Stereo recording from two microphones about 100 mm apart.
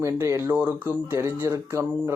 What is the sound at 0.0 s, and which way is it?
Speech, 25° right (ahead or behind).